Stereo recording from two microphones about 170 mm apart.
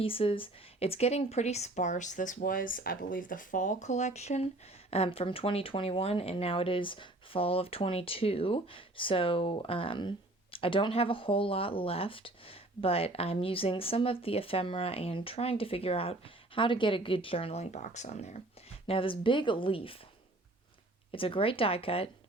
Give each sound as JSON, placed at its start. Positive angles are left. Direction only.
{"t": 0.0, "sound": "speech", "side_deg": 30}
{"t": 18.9, "sound": "speech", "side_deg": 30}
{"t": 21.1, "sound": "speech", "side_deg": 30}